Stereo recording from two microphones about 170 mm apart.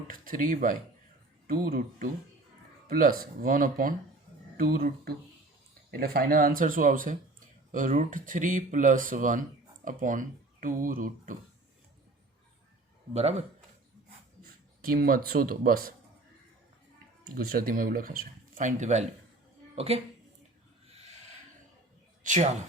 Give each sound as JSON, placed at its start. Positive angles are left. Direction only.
{"t": 0.1, "sound": "speech", "side_deg": -55}
{"t": 14.8, "sound": "speech", "side_deg": -60}
{"t": 17.3, "sound": "a woman's voice", "side_deg": -60}
{"t": 22.2, "sound": "speech", "side_deg": -45}